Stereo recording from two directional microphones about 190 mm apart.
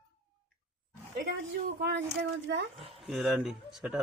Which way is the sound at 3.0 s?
Centre (ahead or behind).